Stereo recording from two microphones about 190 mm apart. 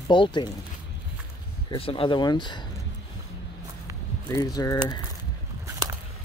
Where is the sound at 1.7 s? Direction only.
30° left (ahead or behind).